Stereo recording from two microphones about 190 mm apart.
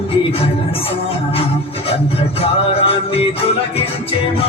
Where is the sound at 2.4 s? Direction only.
30° left (ahead or behind).